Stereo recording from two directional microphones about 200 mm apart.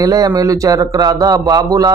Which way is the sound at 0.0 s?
20° right (ahead or behind).